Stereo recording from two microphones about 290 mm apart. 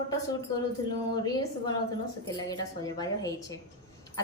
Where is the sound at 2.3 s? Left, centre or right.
Centre.